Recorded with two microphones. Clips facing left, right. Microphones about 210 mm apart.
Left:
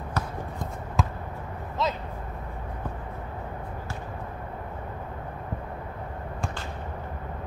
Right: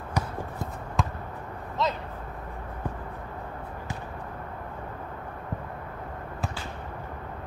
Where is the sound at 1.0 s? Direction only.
Centre (ahead or behind).